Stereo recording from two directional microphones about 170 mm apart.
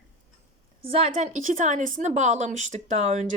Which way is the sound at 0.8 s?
35° right (ahead or behind).